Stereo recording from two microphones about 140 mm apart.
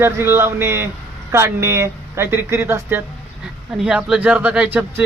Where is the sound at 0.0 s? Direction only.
15° right (ahead or behind).